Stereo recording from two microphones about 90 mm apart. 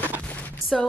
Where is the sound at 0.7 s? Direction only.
Centre (ahead or behind).